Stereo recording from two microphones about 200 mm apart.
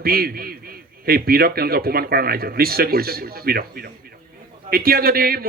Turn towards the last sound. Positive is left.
turn(degrees=-50)  # may be behind; listen again after turning